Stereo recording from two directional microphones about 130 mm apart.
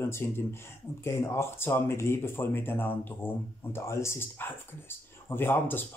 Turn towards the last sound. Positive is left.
turn(degrees=15)  # may be behind; listen again after turning